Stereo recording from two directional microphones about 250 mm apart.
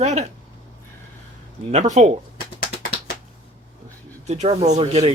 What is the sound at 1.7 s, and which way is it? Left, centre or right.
Speech, right.